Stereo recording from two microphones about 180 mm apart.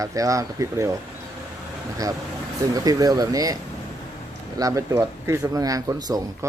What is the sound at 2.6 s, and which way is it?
Speech, 20° right (ahead or behind).